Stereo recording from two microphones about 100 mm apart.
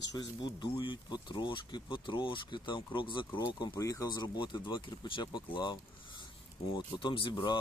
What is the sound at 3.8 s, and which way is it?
Speech, 35° left (ahead or behind).